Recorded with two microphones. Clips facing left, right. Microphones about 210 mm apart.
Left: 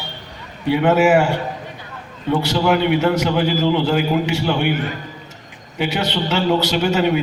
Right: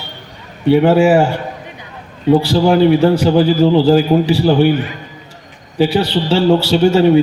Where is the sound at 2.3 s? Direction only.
30° right (ahead or behind).